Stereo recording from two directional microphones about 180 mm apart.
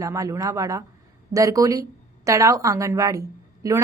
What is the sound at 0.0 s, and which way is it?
A woman's voice, 15° right (ahead or behind).